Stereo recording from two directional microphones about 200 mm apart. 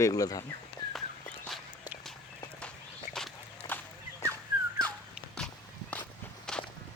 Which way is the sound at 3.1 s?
5° left (ahead or behind).